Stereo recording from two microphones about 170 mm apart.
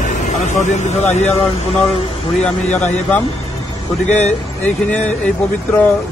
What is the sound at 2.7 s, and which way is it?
Speech, 45° left (ahead or behind).